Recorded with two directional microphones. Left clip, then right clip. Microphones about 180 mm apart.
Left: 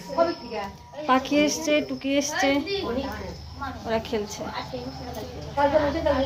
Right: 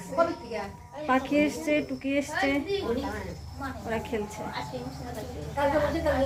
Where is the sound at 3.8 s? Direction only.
10° left (ahead or behind).